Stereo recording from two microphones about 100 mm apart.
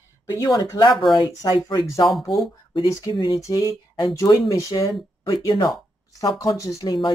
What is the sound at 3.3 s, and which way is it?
Speech, 30° left (ahead or behind).